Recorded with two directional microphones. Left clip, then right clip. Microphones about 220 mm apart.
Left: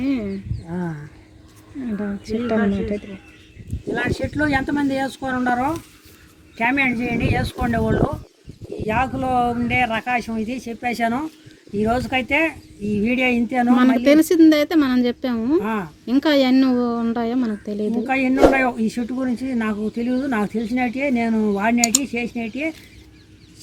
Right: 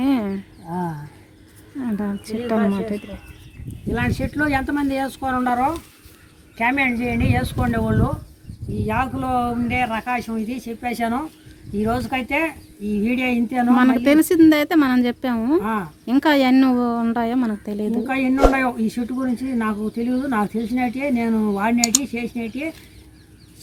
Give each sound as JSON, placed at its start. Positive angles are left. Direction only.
{"t": 0.0, "sound": "a sound", "side_deg": -20}
{"t": 2.2, "sound": "speech", "side_deg": -15}
{"t": 4.1, "sound": "speech", "side_deg": 0}
{"t": 9.2, "sound": "speech", "side_deg": -5}